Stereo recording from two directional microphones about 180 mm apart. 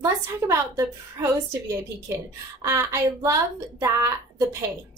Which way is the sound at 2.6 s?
15° right (ahead or behind).